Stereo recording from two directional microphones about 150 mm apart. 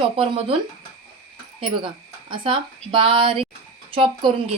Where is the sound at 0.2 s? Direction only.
40° right (ahead or behind).